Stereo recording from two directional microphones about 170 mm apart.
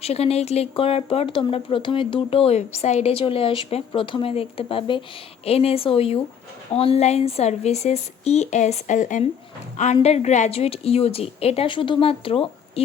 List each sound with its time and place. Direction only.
0.0 s speech: 35° left (ahead or behind)